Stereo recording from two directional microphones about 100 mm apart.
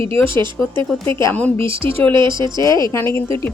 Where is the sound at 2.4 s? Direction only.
45° right (ahead or behind).